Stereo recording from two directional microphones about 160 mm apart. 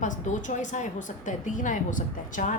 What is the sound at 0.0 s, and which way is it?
A woman's voice, 50° left (ahead or behind).